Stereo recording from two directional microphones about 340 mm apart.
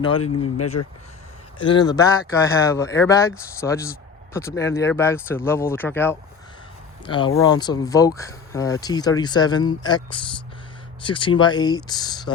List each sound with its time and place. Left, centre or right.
0.2 s speech: left
1.5 s speech: centre